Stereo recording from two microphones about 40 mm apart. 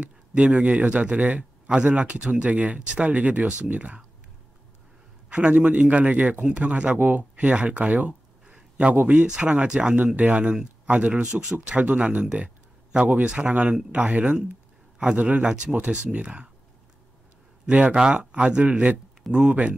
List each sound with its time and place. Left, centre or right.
0.0 s a man's voice: right
5.3 s a man's voice: right
17.6 s a man's voice: right